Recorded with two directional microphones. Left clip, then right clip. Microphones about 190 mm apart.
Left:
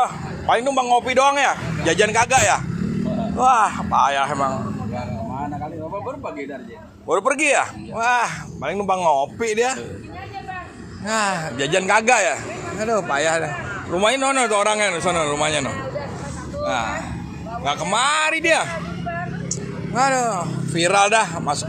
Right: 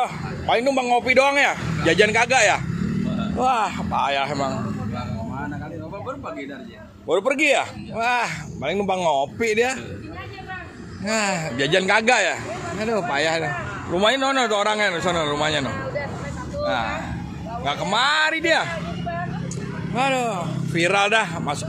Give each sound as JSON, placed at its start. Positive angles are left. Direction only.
{"t": 0.0, "sound": "a man's voice", "side_deg": -25}
{"t": 7.1, "sound": "speech", "side_deg": -20}
{"t": 11.1, "sound": "speech", "side_deg": -20}
{"t": 14.0, "sound": "a man's voice", "side_deg": -5}
{"t": 19.9, "sound": "speech", "side_deg": -10}